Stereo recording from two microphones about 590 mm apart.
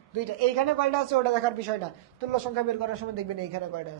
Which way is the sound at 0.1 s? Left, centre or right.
Right.